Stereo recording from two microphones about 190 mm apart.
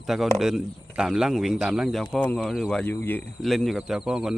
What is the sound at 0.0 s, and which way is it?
Speech, centre (ahead or behind).